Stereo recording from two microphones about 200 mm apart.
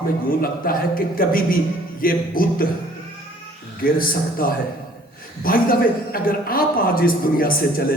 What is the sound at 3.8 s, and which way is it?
A man's voice, 45° left (ahead or behind).